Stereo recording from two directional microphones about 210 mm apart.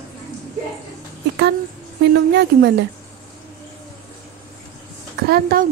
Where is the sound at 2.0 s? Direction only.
55° right (ahead or behind).